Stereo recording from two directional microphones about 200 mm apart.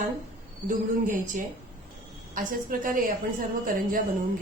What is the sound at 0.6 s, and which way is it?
A woman's voice, 40° right (ahead or behind).